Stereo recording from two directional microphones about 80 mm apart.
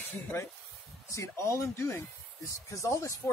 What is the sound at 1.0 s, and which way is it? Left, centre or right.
Speech, left.